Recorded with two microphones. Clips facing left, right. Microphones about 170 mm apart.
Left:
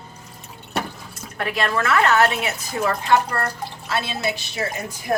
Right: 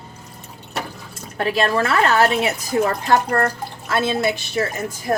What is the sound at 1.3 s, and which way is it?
Speech, 30° right (ahead or behind).